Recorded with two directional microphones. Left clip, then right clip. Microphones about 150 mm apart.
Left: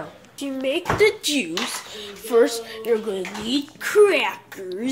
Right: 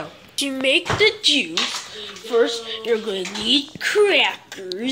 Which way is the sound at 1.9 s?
35° left (ahead or behind).